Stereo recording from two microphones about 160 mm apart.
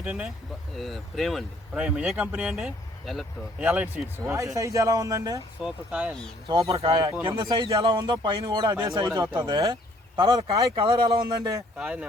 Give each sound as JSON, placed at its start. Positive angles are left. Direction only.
{"t": 0.0, "sound": "speech", "side_deg": -10}
{"t": 5.6, "sound": "speech", "side_deg": -5}
{"t": 6.5, "sound": "speech", "side_deg": -20}
{"t": 11.8, "sound": "speech", "side_deg": -10}